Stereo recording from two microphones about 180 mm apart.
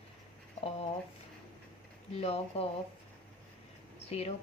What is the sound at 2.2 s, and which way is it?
Speech, 35° left (ahead or behind).